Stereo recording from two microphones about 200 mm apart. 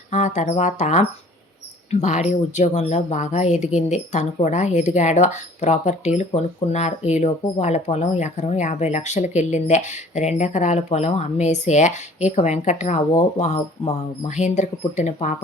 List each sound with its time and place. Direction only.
0.1 s speech: 35° left (ahead or behind)